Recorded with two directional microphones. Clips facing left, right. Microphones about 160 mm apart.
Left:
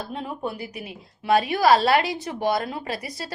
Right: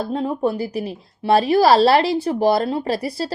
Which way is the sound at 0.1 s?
35° right (ahead or behind).